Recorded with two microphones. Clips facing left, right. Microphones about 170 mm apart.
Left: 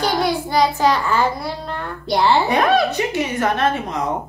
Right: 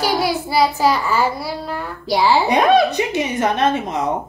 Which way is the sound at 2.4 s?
20° right (ahead or behind).